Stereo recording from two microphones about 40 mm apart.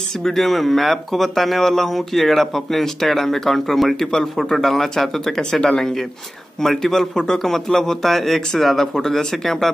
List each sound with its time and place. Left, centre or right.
0.2 s speech: centre
5.4 s a man's voice: centre